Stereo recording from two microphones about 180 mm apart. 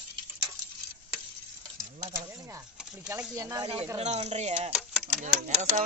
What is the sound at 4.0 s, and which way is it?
Speech, 40° right (ahead or behind).